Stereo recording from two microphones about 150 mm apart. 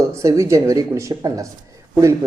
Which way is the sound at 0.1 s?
20° right (ahead or behind).